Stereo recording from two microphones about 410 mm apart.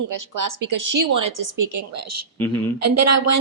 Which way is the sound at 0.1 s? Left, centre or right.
Right.